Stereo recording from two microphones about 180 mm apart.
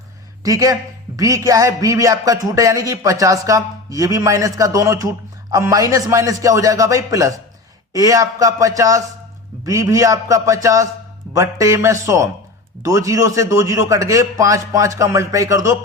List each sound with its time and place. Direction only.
0.4 s a man's voice: 20° right (ahead or behind)